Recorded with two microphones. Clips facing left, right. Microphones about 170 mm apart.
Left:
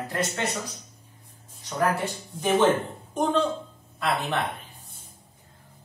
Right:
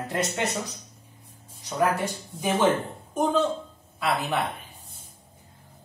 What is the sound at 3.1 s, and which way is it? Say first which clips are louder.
A woman's voice: right 1 dB; 5° right (ahead or behind).